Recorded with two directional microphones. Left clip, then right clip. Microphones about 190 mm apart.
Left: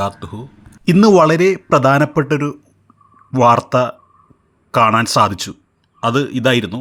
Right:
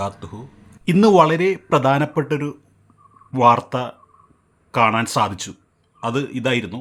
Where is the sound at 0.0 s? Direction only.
20° left (ahead or behind).